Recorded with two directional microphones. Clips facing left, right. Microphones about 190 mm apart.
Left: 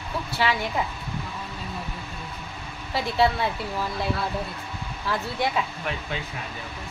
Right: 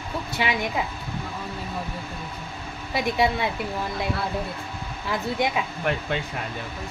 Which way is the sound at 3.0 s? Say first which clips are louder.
Even; 15° right (ahead or behind).